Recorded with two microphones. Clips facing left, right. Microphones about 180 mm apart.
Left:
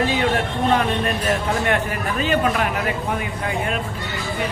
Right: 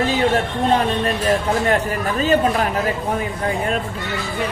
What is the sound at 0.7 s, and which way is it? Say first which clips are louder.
Speech: right 2 dB; 35° right (ahead or behind).